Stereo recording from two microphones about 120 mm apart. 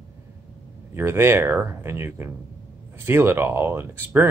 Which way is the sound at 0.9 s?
20° right (ahead or behind).